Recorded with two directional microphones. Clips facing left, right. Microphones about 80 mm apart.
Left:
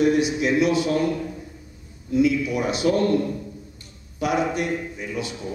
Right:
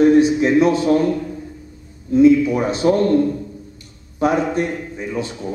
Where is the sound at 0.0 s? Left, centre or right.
Right.